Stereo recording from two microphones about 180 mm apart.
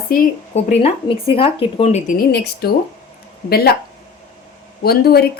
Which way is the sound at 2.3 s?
65° left (ahead or behind).